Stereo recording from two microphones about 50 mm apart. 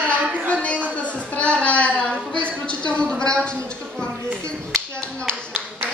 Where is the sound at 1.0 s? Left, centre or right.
Left.